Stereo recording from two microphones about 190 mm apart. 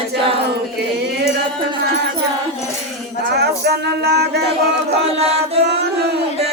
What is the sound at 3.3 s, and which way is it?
Music, 60° right (ahead or behind).